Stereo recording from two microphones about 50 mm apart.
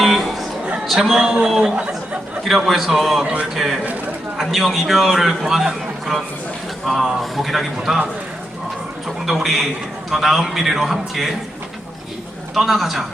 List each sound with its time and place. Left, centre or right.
0.0 s a sound: centre
0.9 s a man's voice: centre
9.2 s a man's voice: centre
12.5 s a man's voice: centre